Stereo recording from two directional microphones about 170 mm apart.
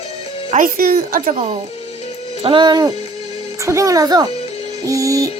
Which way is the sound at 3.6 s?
15° right (ahead or behind).